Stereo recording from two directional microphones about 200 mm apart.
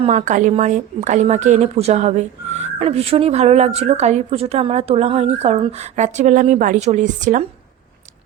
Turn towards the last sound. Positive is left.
turn(degrees=-40)  # may be behind; listen again after turning